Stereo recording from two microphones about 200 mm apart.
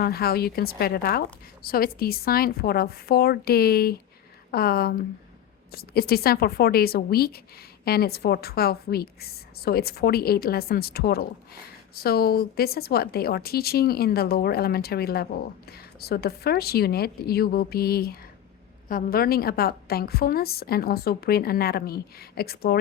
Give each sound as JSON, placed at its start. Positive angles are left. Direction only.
{"t": 0.0, "sound": "a woman's voice", "side_deg": 50}